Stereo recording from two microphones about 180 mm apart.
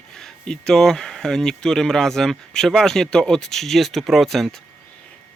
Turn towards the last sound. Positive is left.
turn(degrees=0)  # may be behind; listen again after turning